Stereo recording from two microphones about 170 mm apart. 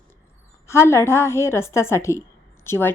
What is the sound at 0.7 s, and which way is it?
A woman's voice, 15° left (ahead or behind).